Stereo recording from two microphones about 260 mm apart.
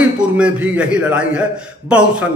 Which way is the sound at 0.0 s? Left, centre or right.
Centre.